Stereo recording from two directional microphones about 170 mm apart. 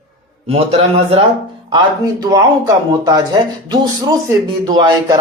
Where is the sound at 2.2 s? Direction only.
20° right (ahead or behind).